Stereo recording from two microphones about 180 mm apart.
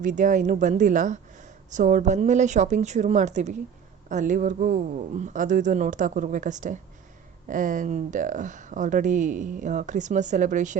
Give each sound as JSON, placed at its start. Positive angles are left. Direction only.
{"t": 0.0, "sound": "speech", "side_deg": -45}